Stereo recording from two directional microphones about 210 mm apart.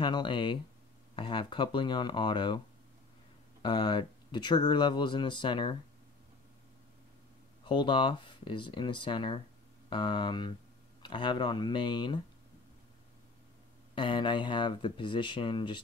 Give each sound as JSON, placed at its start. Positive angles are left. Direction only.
{"t": 0.0, "sound": "speech", "side_deg": 20}
{"t": 3.6, "sound": "speech", "side_deg": 20}
{"t": 7.6, "sound": "speech", "side_deg": 20}
{"t": 13.9, "sound": "speech", "side_deg": 20}